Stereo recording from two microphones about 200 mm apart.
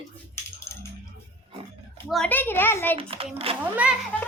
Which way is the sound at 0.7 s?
15° left (ahead or behind).